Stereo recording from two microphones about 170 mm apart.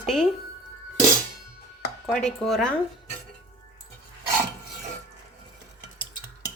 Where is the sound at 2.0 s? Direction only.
Centre (ahead or behind).